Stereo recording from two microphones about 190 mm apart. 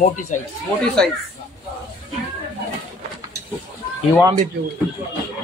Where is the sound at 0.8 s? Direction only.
5° left (ahead or behind).